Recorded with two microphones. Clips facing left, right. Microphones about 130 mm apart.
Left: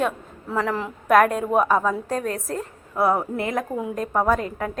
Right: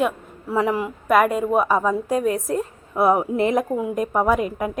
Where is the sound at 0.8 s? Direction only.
5° right (ahead or behind).